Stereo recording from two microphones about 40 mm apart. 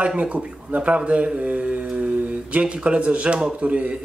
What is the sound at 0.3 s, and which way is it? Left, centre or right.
A man's voice, right.